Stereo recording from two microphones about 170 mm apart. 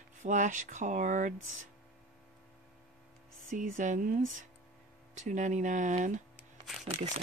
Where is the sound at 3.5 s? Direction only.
50° right (ahead or behind).